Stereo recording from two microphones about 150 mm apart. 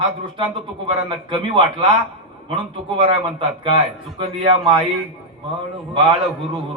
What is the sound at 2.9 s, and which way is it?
A man's voice, 35° right (ahead or behind).